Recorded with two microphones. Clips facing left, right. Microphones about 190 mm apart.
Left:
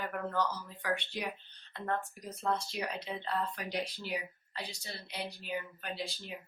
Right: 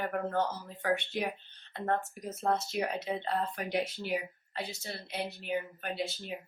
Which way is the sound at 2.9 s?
25° right (ahead or behind).